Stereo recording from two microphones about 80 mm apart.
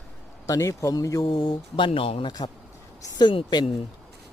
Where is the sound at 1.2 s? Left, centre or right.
Left.